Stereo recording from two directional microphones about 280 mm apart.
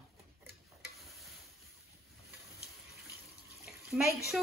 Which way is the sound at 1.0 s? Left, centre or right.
Centre.